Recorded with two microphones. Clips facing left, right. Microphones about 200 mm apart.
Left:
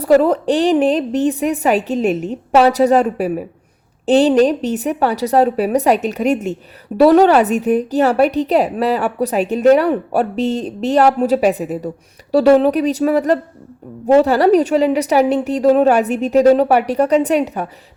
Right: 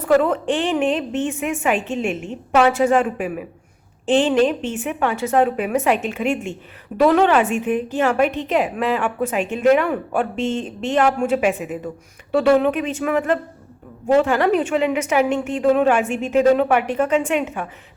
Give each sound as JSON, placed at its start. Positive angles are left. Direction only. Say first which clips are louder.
{"t": 0.2, "sound": "a woman's voice", "louder": "left 5 dB", "side_deg": 35}